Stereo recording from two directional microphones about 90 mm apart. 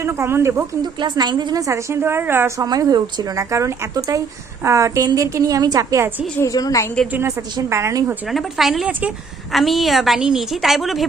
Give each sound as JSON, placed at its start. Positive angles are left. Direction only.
{"t": 0.0, "sound": "a woman's voice", "side_deg": -30}
{"t": 0.8, "sound": "a woman's voice", "side_deg": -55}
{"t": 1.6, "sound": "a woman's voice", "side_deg": -30}
{"t": 2.6, "sound": "a woman's voice", "side_deg": -45}
{"t": 3.3, "sound": "a woman's voice", "side_deg": -35}
{"t": 6.4, "sound": "a woman's voice", "side_deg": 40}
{"t": 7.1, "sound": "a woman's voice", "side_deg": -30}
{"t": 8.3, "sound": "a woman's voice", "side_deg": 0}
{"t": 8.9, "sound": "a woman's voice", "side_deg": -20}
{"t": 9.5, "sound": "a woman's voice", "side_deg": 0}